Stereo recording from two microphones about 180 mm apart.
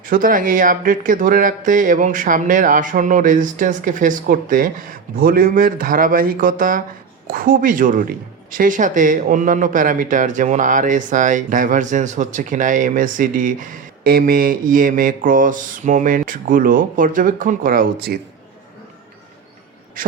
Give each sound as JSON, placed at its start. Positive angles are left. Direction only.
{"t": 0.0, "sound": "speech", "side_deg": -50}
{"t": 20.0, "sound": "a man's voice", "side_deg": -50}